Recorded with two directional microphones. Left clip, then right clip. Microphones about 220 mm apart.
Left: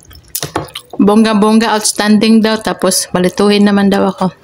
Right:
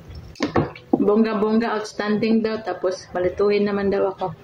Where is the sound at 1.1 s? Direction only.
50° left (ahead or behind).